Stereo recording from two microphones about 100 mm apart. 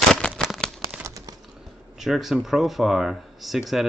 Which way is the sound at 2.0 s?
5° right (ahead or behind).